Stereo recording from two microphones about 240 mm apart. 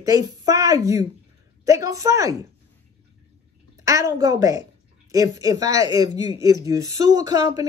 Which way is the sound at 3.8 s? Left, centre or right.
Centre.